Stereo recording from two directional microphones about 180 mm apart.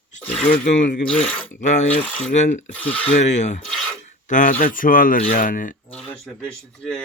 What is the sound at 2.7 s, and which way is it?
Speech, 10° left (ahead or behind).